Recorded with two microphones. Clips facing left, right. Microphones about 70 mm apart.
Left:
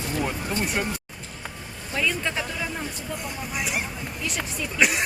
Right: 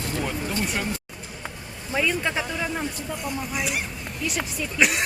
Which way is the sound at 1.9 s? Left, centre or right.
Centre.